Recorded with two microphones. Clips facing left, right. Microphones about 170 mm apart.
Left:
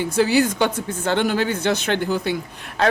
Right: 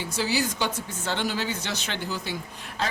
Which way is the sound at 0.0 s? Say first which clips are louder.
Left 9 dB; 55° left (ahead or behind).